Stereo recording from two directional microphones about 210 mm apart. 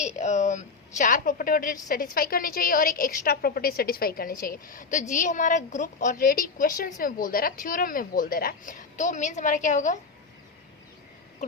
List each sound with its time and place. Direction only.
0.2 s a woman's voice: 35° left (ahead or behind)